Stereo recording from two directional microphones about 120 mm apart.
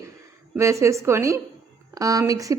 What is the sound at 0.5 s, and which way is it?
A woman's voice, 25° right (ahead or behind).